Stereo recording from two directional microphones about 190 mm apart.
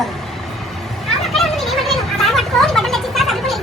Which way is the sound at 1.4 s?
Centre (ahead or behind).